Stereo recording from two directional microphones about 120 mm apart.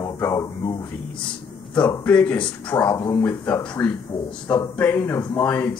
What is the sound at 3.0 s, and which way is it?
Speech, 25° left (ahead or behind).